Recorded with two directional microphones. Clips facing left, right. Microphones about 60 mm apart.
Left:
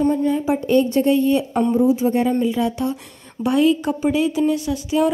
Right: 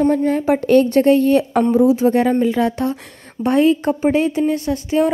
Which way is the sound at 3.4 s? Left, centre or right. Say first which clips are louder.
Right 2 dB; right.